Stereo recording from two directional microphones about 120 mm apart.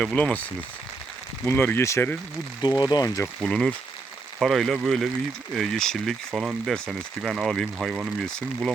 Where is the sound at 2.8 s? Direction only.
35° left (ahead or behind).